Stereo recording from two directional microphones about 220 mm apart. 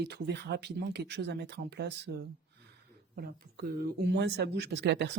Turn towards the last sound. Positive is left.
turn(degrees=-50)  # may be behind; listen again after turning